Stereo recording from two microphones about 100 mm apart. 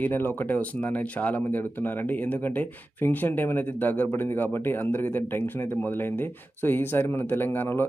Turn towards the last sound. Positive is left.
turn(degrees=20)  # may be behind; listen again after turning